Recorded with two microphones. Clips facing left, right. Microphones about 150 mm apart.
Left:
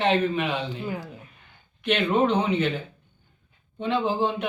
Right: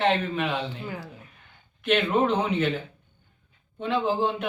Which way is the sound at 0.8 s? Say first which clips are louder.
Left 4 dB; 15° left (ahead or behind).